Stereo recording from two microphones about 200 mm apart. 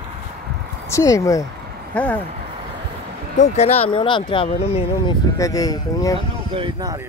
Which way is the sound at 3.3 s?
35° left (ahead or behind).